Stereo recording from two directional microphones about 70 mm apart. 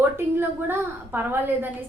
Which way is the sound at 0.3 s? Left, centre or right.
Right.